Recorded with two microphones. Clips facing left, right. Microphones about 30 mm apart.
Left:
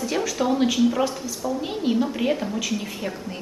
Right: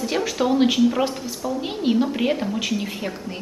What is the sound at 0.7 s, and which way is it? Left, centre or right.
Speech, centre.